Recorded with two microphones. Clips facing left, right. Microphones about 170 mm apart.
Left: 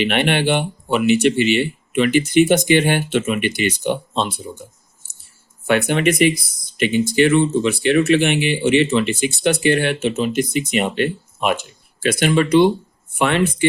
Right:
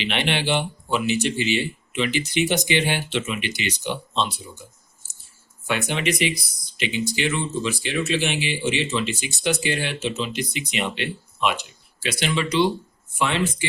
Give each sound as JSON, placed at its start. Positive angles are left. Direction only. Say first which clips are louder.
{"t": 0.0, "sound": "speech", "louder": "left 7 dB", "side_deg": 55}
{"t": 5.6, "sound": "speech", "louder": "left 8 dB", "side_deg": 60}